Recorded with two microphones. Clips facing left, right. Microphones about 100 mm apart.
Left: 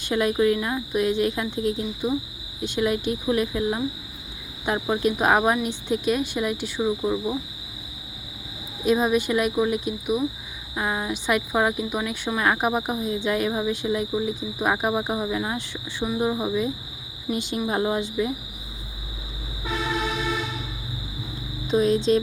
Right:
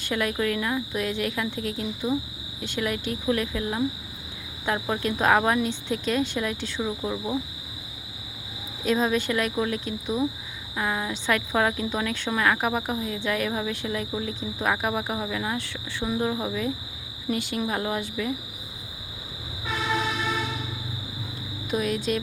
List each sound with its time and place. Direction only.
0.0 s speech: 20° left (ahead or behind)
4.6 s cricket: 20° left (ahead or behind)
8.8 s cricket: 15° left (ahead or behind)
12.4 s speech: 20° left (ahead or behind)
16.0 s cricket: 10° left (ahead or behind)
17.3 s speech: 20° left (ahead or behind)
21.7 s speech: 25° left (ahead or behind)